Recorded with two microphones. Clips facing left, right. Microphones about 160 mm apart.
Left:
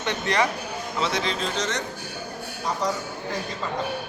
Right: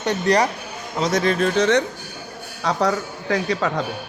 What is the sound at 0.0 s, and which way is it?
A man's voice, 40° right (ahead or behind).